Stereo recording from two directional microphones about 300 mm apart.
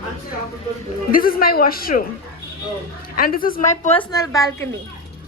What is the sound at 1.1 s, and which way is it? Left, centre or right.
Speech, left.